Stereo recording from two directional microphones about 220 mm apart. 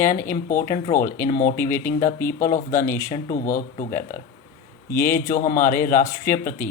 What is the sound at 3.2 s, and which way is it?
Speech, 40° left (ahead or behind).